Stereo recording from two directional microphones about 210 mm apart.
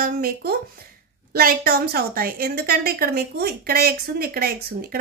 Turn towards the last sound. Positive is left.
turn(degrees=-45)  # may be behind; listen again after turning